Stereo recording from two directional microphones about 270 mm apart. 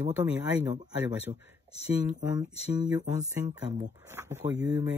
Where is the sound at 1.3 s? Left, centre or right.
Centre.